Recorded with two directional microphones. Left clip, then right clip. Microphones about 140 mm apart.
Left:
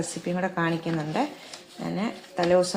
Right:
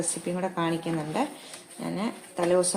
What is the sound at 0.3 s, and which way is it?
Speech, 20° left (ahead or behind).